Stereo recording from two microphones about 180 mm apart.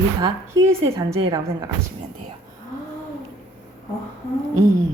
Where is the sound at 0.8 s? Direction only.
20° right (ahead or behind).